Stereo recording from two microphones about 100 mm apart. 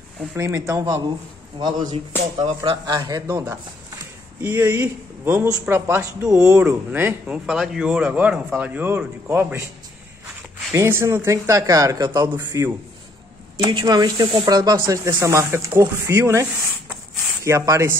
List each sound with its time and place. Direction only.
0.4 s speech: 30° right (ahead or behind)
1.6 s speech: 50° right (ahead or behind)
2.9 s speech: 40° right (ahead or behind)
4.4 s speech: 20° right (ahead or behind)
6.6 s speech: 20° right (ahead or behind)
7.4 s speech: 5° right (ahead or behind); by 9.7 s 25° right (ahead or behind)
10.7 s speech: 25° right (ahead or behind)
12.3 s speech: 20° right (ahead or behind)
13.7 s speech: 50° right (ahead or behind); by 16.4 s 30° right (ahead or behind)
17.5 s speech: 30° right (ahead or behind)